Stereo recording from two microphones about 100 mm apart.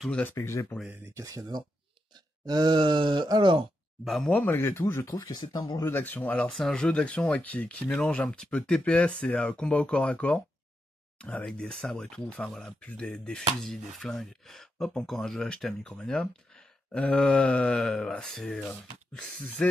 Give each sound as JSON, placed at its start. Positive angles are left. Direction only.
{"t": 0.4, "sound": "speech", "side_deg": 30}
{"t": 1.1, "sound": "speech", "side_deg": -35}
{"t": 2.4, "sound": "groan", "side_deg": -45}
{"t": 4.0, "sound": "speech", "side_deg": 0}
{"t": 4.3, "sound": "speech", "side_deg": 15}
{"t": 5.9, "sound": "speech", "side_deg": 20}